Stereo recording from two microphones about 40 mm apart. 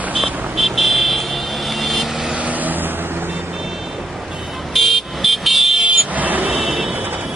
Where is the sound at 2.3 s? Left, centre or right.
Right.